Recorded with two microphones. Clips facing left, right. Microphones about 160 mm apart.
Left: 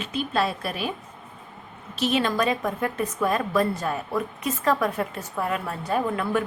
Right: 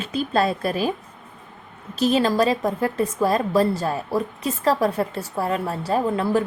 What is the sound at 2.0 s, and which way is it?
A woman's voice, 35° right (ahead or behind).